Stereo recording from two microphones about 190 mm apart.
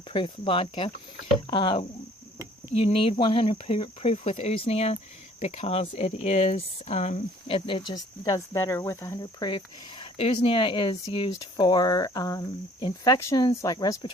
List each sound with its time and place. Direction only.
0.1 s speech: 25° left (ahead or behind)
2.7 s cricket: 30° left (ahead or behind)
5.4 s speech: 35° left (ahead or behind); by 9.5 s 15° left (ahead or behind)
9.5 s speech: 25° left (ahead or behind)